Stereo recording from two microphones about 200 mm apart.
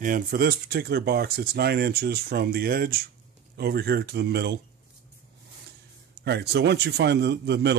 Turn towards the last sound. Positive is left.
turn(degrees=-55)  # may be behind; listen again after turning